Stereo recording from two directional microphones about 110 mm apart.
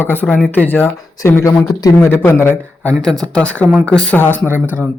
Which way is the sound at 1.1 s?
30° left (ahead or behind).